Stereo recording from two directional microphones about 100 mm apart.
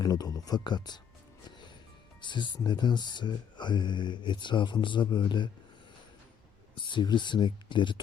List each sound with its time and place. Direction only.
0.0 s speech: 40° left (ahead or behind)
2.2 s speech: 50° left (ahead or behind)
6.7 s speech: 55° left (ahead or behind)